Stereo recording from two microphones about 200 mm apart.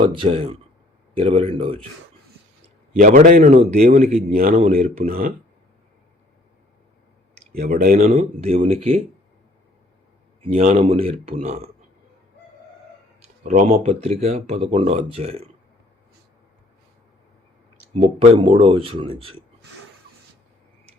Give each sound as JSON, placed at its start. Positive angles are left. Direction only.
{"t": 0.0, "sound": "speech", "side_deg": -25}
{"t": 2.9, "sound": "speech", "side_deg": -40}
{"t": 3.6, "sound": "speech", "side_deg": -35}
{"t": 7.5, "sound": "speech", "side_deg": -45}
{"t": 8.1, "sound": "speech", "side_deg": -30}
{"t": 10.5, "sound": "speech", "side_deg": -35}
{"t": 13.4, "sound": "speech", "side_deg": -40}
{"t": 17.9, "sound": "speech", "side_deg": -30}